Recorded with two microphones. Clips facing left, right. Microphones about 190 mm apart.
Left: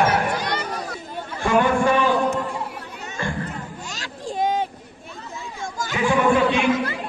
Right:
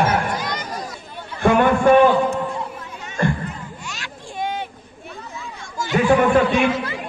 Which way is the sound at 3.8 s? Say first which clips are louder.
Left 2 dB; 40° left (ahead or behind).